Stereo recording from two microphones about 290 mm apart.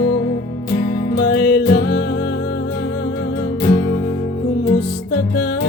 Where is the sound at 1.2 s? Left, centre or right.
Left.